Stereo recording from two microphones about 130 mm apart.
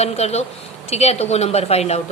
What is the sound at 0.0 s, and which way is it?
A woman's voice, 55° left (ahead or behind).